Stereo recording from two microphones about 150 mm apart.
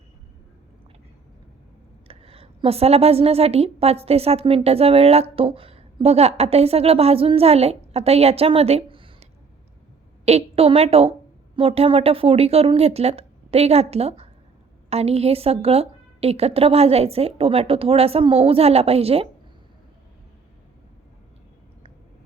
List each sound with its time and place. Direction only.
2.0 s a woman's voice: 40° right (ahead or behind)